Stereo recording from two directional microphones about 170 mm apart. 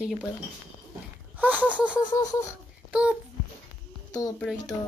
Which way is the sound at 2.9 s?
5° right (ahead or behind).